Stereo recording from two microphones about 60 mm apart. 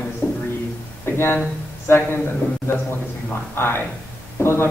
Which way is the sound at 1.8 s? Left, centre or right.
Left.